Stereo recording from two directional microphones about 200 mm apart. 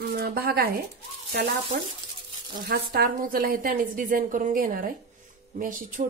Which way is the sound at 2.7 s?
45° right (ahead or behind).